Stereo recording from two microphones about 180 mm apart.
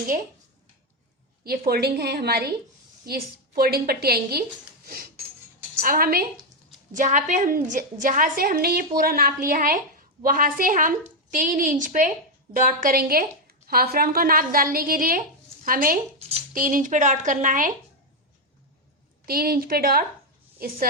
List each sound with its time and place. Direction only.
1.5 s a woman's voice: 60° right (ahead or behind)
5.8 s a woman's voice: 55° right (ahead or behind)
6.9 s a woman's voice: 45° right (ahead or behind)
16.1 s a sound: 35° right (ahead or behind)
16.6 s a woman's voice: 45° right (ahead or behind)
19.2 s a woman's voice: 55° right (ahead or behind)